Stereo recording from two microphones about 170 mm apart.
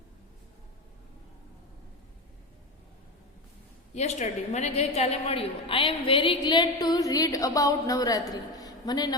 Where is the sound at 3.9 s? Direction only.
40° left (ahead or behind).